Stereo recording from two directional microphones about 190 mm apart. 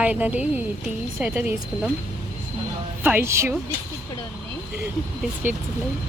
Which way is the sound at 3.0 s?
10° right (ahead or behind).